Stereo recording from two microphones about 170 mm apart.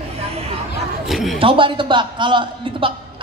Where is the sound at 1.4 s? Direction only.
30° right (ahead or behind).